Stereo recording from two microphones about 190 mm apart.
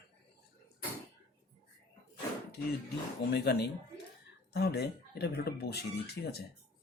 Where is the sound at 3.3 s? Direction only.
60° left (ahead or behind).